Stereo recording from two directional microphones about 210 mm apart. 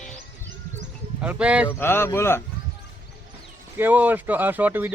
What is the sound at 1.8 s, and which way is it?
Speech, 10° left (ahead or behind).